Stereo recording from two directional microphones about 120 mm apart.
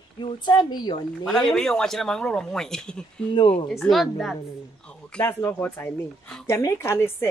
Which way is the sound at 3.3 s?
55° left (ahead or behind).